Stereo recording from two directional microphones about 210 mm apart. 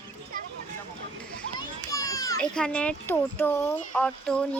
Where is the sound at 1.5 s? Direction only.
15° left (ahead or behind).